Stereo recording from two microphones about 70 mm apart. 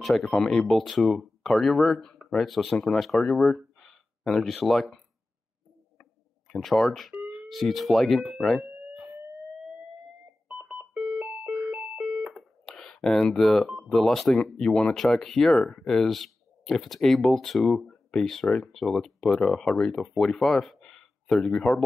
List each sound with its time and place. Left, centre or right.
0.0 s speech: centre
3.5 s a sound: centre
10.5 s telephone dialing: centre
11.5 s alarm clock: centre
12.3 s telephone dialing: centre
13.8 s speech: centre